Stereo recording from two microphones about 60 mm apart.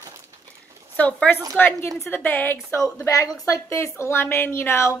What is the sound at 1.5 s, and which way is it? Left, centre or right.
A woman's voice, left.